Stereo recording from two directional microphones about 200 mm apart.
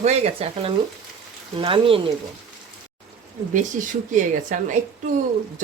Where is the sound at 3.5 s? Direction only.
40° right (ahead or behind).